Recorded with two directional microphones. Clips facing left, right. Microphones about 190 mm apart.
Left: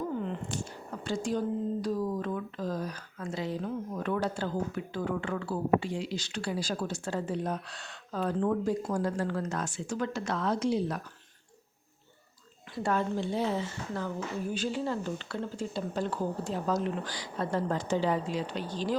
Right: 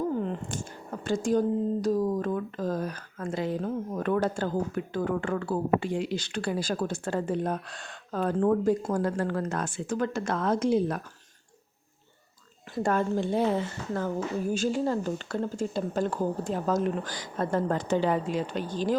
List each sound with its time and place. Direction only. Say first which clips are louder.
0.2 s speech: right 3 dB; 45° right (ahead or behind)
12.7 s speech: right 4 dB; 50° right (ahead or behind)